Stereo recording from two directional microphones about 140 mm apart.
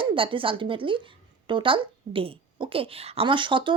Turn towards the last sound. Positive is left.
turn(degrees=-35)  # may be behind; listen again after turning